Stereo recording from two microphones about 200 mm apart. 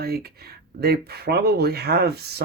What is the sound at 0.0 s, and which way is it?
Speech, 50° right (ahead or behind).